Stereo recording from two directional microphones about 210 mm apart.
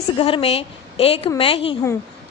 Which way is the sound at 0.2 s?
25° left (ahead or behind).